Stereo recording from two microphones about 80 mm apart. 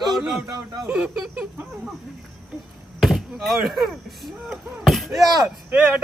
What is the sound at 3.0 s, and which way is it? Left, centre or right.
Speech, centre.